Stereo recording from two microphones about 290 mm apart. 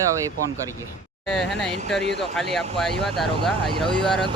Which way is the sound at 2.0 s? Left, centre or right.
Left.